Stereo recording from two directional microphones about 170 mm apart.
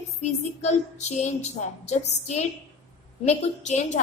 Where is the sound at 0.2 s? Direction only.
40° left (ahead or behind).